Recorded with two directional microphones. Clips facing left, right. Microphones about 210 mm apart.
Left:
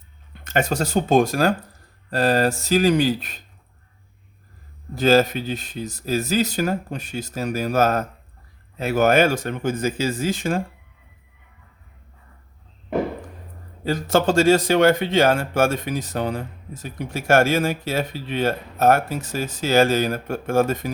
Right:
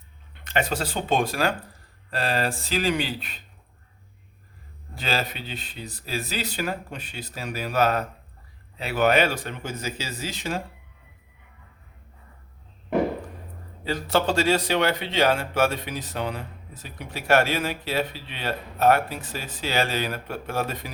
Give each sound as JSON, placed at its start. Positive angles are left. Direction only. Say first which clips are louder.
{"t": 0.3, "sound": "speech", "louder": "left 4 dB", "side_deg": 45}
{"t": 4.9, "sound": "speech", "louder": "left 12 dB", "side_deg": 45}
{"t": 13.8, "sound": "speech", "louder": "left 4 dB", "side_deg": 45}